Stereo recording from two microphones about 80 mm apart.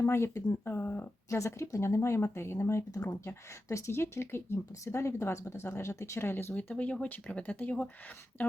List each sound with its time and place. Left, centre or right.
0.0 s speech: left
1.4 s speech: left